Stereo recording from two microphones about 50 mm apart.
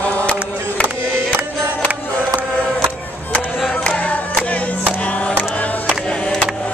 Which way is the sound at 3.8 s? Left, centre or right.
Left.